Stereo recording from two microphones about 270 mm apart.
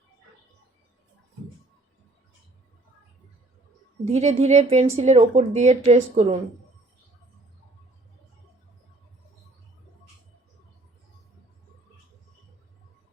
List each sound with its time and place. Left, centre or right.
4.0 s speech: right